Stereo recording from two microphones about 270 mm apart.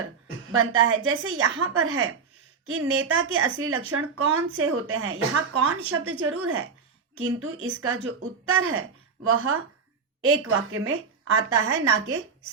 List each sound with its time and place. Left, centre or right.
0.5 s speech: right